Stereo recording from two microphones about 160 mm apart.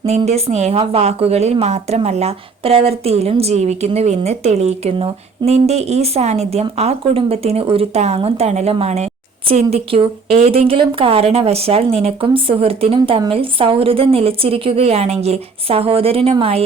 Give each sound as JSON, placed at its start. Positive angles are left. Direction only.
{"t": 0.3, "sound": "a woman's voice", "side_deg": -40}